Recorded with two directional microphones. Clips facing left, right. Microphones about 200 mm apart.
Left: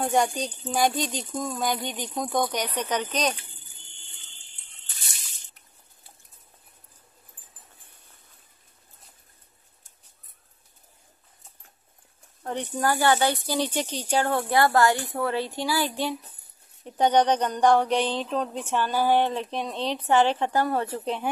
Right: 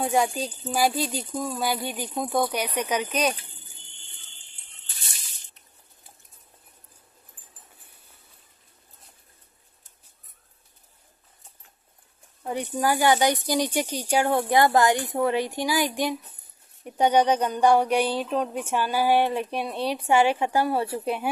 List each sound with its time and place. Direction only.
0.0 s speech: 5° right (ahead or behind)
12.4 s speech: 10° right (ahead or behind)